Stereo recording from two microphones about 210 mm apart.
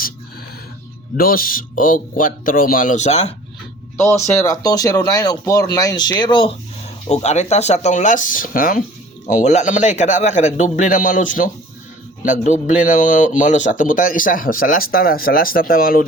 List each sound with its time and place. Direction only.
1.1 s a man's voice: 45° left (ahead or behind)
4.0 s speech: 15° left (ahead or behind)
7.1 s a man's voice: 30° left (ahead or behind)